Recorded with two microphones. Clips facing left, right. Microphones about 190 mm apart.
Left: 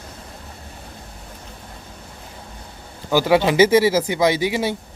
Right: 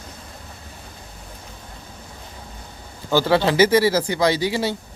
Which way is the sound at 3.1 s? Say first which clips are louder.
Left 2 dB; 15° left (ahead or behind).